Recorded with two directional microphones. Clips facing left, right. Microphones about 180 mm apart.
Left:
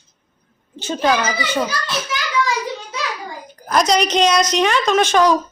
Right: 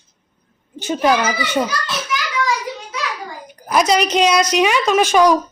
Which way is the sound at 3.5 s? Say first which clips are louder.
Right 1 dB; 10° right (ahead or behind).